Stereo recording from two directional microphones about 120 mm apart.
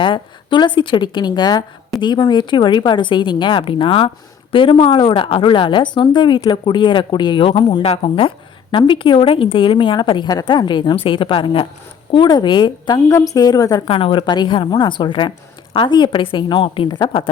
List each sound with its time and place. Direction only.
0.0 s a woman's voice: 40° left (ahead or behind)
7.8 s a woman's voice: 55° left (ahead or behind)
13.1 s a woman's voice: 30° left (ahead or behind)
13.8 s a woman's voice: 50° left (ahead or behind)